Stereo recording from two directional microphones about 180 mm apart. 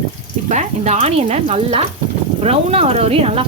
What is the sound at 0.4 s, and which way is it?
A woman's voice, 40° right (ahead or behind).